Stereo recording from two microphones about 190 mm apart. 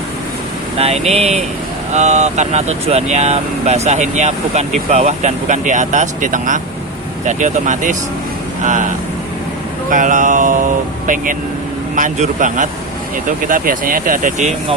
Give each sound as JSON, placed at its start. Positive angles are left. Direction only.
{"t": 0.8, "sound": "speech", "side_deg": -35}
{"t": 9.9, "sound": "speech", "side_deg": -45}